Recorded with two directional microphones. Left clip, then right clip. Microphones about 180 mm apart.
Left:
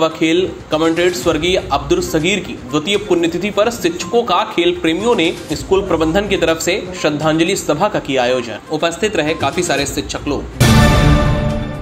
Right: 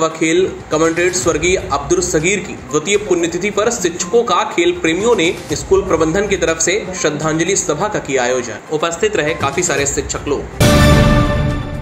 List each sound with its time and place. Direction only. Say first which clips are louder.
0.0 s speech: even; 45° left (ahead or behind)
10.6 s music: right 1 dB; centre (ahead or behind)